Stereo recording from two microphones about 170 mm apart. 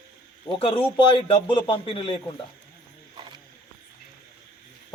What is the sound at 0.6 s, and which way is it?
A man's voice, 30° left (ahead or behind).